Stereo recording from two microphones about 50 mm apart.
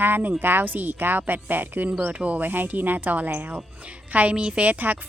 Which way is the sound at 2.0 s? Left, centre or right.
Right.